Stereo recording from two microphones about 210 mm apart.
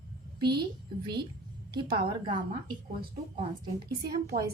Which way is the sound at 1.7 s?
25° right (ahead or behind).